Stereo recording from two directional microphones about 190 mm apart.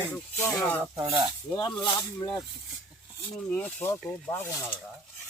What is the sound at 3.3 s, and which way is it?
Speech, 5° left (ahead or behind).